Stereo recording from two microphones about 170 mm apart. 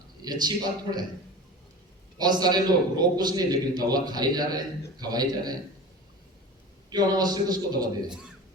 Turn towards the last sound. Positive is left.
turn(degrees=-25)  # may be behind; listen again after turning